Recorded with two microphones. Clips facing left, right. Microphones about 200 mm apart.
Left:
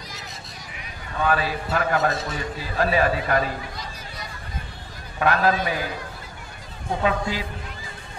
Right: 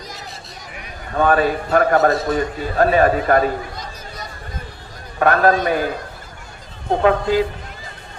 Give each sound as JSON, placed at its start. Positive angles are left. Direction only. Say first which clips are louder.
{"t": 1.1, "sound": "a man's voice", "louder": "right 7 dB", "side_deg": -50}
{"t": 6.9, "sound": "a man's voice", "louder": "right 8 dB", "side_deg": -55}